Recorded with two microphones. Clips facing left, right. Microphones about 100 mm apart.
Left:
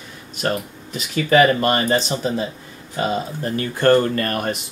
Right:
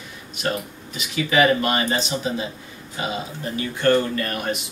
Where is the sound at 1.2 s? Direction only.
40° left (ahead or behind).